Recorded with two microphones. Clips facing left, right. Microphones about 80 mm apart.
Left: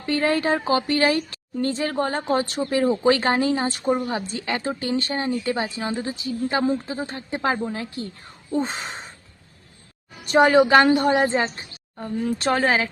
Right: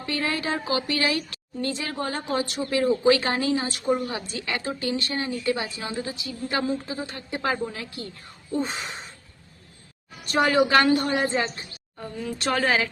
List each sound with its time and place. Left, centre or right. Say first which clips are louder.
0.0 s a woman's voice: left 6 dB; left
10.2 s a woman's voice: left 5 dB; left